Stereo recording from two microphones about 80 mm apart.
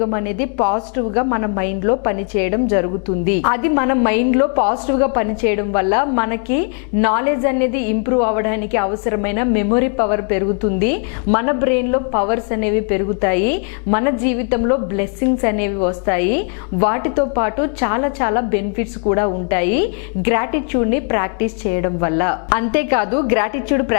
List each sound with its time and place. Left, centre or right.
0.0 s a woman's voice: left